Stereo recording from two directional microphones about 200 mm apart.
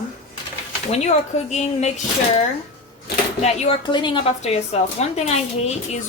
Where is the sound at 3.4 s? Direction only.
25° left (ahead or behind).